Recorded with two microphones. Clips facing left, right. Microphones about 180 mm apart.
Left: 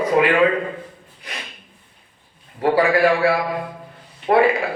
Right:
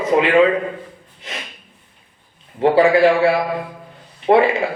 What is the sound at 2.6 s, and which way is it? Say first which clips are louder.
A man's voice: right 4 dB; 25° right (ahead or behind).